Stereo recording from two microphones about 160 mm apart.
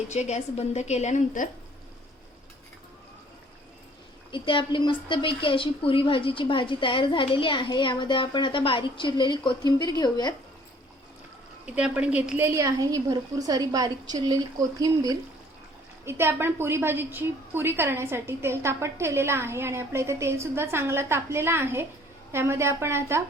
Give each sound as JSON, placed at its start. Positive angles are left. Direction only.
{"t": 0.1, "sound": "a woman's voice", "side_deg": 45}
{"t": 4.3, "sound": "a woman's voice", "side_deg": 30}
{"t": 11.6, "sound": "a woman's voice", "side_deg": -10}